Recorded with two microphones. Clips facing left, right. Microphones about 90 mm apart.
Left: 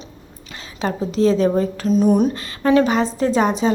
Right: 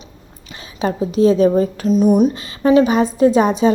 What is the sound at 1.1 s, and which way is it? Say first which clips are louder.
A woman's voice: right 4 dB; 15° right (ahead or behind).